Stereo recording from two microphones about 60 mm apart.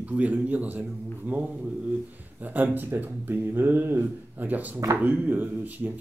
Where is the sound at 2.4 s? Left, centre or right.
Right.